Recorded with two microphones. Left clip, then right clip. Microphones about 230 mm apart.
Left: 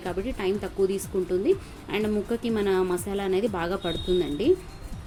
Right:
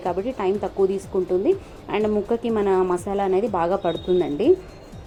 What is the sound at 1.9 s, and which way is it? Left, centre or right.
A woman's voice, centre.